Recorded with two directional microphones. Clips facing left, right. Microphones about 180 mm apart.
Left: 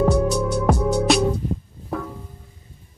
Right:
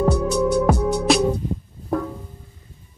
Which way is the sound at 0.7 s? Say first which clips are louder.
Even; centre (ahead or behind).